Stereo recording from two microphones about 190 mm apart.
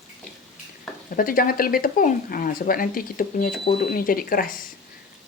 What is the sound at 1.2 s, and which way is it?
Speech, 50° left (ahead or behind).